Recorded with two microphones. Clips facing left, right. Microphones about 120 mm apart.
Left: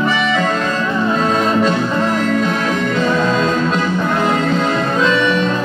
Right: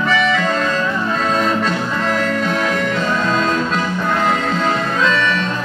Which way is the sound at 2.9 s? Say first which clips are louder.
Left 3 dB; 15° left (ahead or behind).